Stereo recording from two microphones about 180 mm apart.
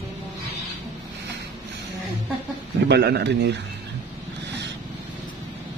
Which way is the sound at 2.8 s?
70° right (ahead or behind).